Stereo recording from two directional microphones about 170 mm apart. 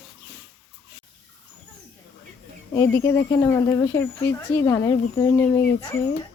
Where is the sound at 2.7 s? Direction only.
15° left (ahead or behind).